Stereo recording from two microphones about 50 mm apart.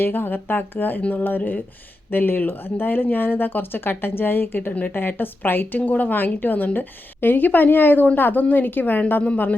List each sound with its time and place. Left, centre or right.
0.0 s a woman's voice: left